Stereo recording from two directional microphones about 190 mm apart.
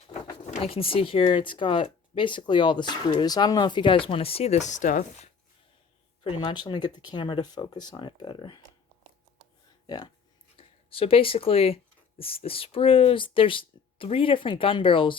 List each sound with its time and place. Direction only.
0.4 s speech: 35° left (ahead or behind)
6.2 s speech: 25° left (ahead or behind)
9.8 s speech: 20° left (ahead or behind)